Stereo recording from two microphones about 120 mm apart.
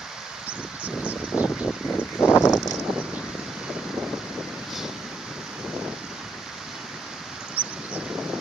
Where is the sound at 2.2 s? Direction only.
20° left (ahead or behind).